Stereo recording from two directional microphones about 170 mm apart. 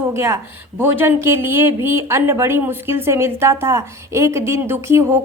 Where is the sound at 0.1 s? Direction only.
15° right (ahead or behind).